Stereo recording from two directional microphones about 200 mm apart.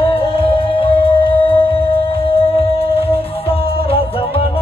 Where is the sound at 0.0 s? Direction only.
30° left (ahead or behind).